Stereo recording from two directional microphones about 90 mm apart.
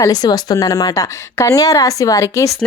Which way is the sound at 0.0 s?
45° left (ahead or behind).